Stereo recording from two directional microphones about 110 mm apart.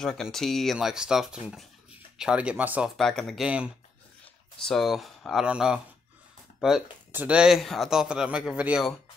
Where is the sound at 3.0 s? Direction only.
5° left (ahead or behind).